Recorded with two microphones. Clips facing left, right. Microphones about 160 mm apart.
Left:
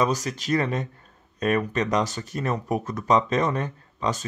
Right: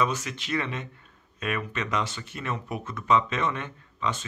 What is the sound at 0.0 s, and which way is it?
Speech, 40° left (ahead or behind).